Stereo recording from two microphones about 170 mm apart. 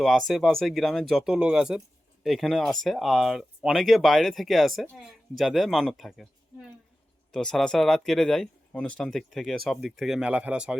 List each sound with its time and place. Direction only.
0.0 s speech: centre (ahead or behind)
7.3 s speech: 5° left (ahead or behind)